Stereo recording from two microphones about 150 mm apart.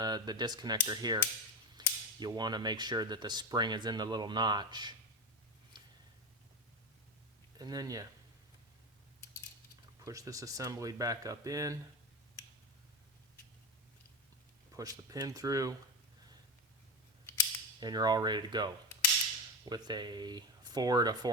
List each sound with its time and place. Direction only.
0.0 s speech: 30° right (ahead or behind)
7.6 s speech: 25° right (ahead or behind)
10.0 s speech: 20° right (ahead or behind)
14.8 s speech: 25° right (ahead or behind)
17.7 s speech: 25° right (ahead or behind)